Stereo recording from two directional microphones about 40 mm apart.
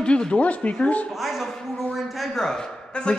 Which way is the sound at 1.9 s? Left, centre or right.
Centre.